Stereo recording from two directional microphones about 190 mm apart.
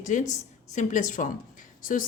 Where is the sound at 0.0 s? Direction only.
40° left (ahead or behind).